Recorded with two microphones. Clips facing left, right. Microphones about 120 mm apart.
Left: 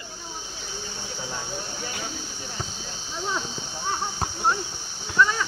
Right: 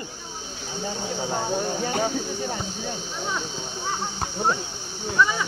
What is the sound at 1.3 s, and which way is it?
Speech, 50° right (ahead or behind).